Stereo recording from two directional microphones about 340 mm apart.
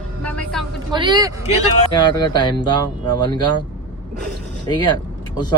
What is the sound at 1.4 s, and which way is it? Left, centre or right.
Speech, centre.